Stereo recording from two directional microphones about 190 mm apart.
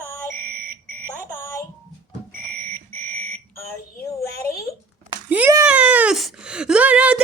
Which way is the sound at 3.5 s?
15° left (ahead or behind).